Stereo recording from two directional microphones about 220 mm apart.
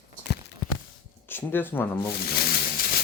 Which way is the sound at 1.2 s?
10° left (ahead or behind).